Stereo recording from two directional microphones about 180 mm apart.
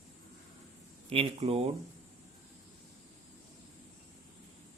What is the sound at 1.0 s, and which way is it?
Speech, 35° right (ahead or behind).